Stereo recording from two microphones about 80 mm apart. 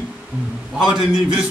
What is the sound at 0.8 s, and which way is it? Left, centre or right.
Speech, centre.